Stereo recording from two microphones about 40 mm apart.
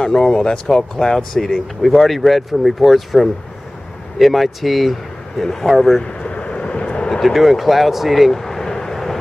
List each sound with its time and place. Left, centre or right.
0.0 s speech: centre
6.0 s vehicle: left
7.2 s speech: centre
8.3 s vehicle: centre